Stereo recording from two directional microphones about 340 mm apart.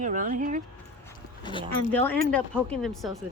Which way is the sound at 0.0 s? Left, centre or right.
Right.